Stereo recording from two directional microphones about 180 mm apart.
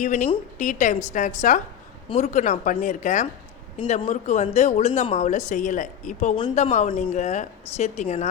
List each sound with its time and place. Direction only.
0.0 s a woman's voice: 50° left (ahead or behind)